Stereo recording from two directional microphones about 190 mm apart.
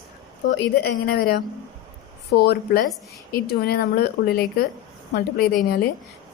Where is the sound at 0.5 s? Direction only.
60° left (ahead or behind).